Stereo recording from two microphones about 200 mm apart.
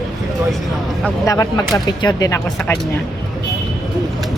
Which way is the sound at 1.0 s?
15° left (ahead or behind).